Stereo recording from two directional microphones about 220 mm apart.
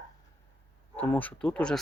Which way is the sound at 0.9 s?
5° left (ahead or behind).